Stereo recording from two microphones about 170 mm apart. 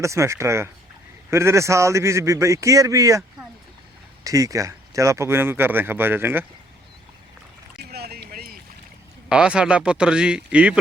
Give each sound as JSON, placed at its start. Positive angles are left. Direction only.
{"t": 0.0, "sound": "speech", "side_deg": -15}
{"t": 7.9, "sound": "boat", "side_deg": -65}
{"t": 9.3, "sound": "a man's voice", "side_deg": -5}